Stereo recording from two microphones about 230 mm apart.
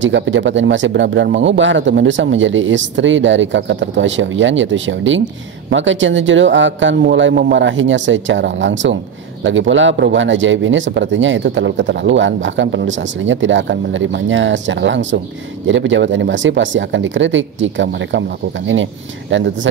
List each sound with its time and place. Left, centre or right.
0.0 s speech: right
19.3 s speech: right